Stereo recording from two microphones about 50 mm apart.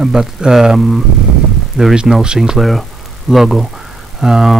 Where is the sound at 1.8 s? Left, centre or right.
Right.